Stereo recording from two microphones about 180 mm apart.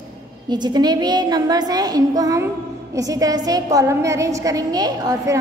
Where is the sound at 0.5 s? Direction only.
25° right (ahead or behind).